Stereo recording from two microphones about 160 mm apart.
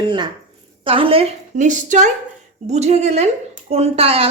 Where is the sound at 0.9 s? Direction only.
35° right (ahead or behind).